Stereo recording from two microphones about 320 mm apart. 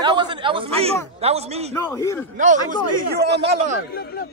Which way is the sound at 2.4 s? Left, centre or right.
Right.